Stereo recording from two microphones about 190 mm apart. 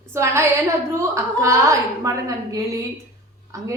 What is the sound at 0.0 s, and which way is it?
A woman's voice, 15° right (ahead or behind).